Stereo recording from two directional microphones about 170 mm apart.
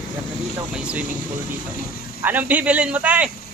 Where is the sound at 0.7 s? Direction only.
5° right (ahead or behind).